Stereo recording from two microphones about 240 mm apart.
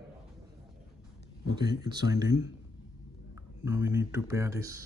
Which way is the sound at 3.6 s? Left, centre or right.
Centre.